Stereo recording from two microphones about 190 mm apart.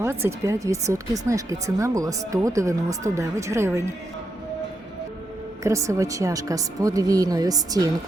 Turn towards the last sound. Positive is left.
turn(degrees=-20)  # may be behind; listen again after turning